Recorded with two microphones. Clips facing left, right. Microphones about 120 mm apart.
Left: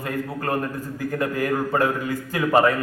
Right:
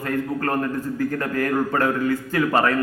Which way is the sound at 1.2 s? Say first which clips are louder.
Left 2 dB; 15° left (ahead or behind).